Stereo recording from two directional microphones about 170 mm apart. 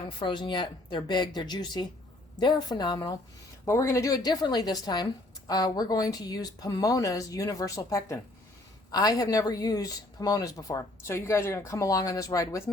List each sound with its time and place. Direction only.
0.2 s a woman's voice: 30° left (ahead or behind)